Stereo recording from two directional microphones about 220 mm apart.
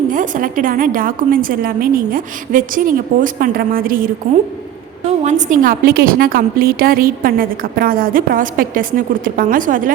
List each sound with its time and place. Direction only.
0.1 s a woman's voice: 40° right (ahead or behind)